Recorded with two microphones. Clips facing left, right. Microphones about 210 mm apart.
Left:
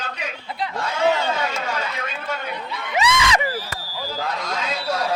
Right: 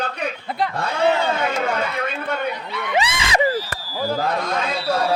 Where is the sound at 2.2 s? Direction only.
60° right (ahead or behind).